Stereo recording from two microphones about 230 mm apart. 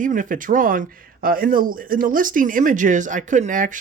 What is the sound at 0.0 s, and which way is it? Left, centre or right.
Speech, right.